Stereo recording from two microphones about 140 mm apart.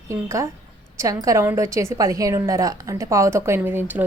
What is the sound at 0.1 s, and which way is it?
A woman's voice, 20° right (ahead or behind).